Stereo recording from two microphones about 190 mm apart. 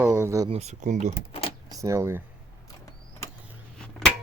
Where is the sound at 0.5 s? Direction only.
35° right (ahead or behind).